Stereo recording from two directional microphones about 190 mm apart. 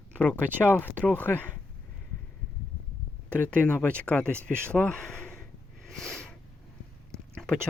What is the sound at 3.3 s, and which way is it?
Speech, 5° left (ahead or behind).